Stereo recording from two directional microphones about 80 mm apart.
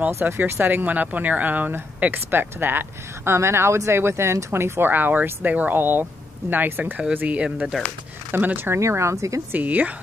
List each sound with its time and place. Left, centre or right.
0.1 s speech: right; by 7.5 s centre
7.5 s speech: centre
8.3 s speech: right
9.5 s speech: right